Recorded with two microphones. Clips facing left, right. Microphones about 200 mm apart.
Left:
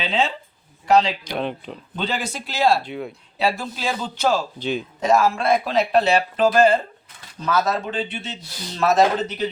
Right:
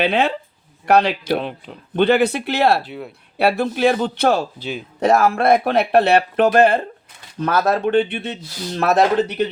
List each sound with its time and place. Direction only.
0.0 s speech: 65° right (ahead or behind)
1.2 s speech: 5° right (ahead or behind)
2.0 s speech: 60° right (ahead or behind)
2.8 s speech: 5° right (ahead or behind)
3.3 s speech: 60° right (ahead or behind)